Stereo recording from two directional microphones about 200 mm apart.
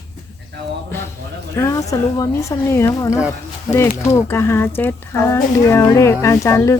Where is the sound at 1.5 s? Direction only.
15° left (ahead or behind).